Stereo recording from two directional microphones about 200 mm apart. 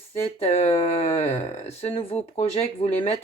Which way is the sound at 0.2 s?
30° left (ahead or behind).